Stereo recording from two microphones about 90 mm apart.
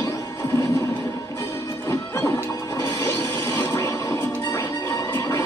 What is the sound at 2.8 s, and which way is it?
Television, 30° left (ahead or behind).